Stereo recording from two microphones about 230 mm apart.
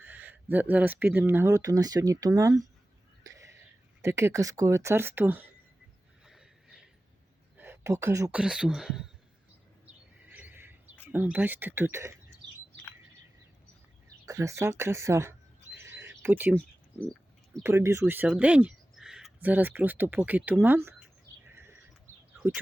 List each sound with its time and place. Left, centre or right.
0.0 s speech: centre
6.2 s a sound: centre
7.5 s speech: centre
9.8 s bird: centre
11.1 s speech: centre
12.4 s bird: centre
14.3 s speech: centre
15.8 s a sound: centre
17.6 s speech: centre
21.5 s a sound: centre
22.4 s speech: centre